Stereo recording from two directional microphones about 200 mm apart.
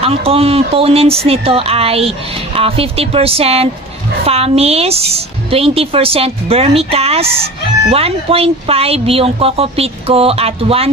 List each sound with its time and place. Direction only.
0.0 s speech: 30° right (ahead or behind)